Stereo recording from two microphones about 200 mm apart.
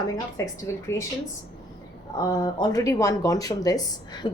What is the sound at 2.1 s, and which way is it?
Speech, 20° left (ahead or behind).